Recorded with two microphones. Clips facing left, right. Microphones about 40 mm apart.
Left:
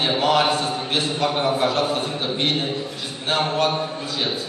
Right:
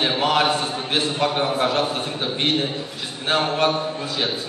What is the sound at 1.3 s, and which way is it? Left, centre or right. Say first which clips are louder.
Speech: even; centre.